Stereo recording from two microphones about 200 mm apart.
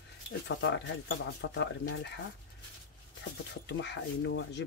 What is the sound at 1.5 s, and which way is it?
Speech, 60° left (ahead or behind).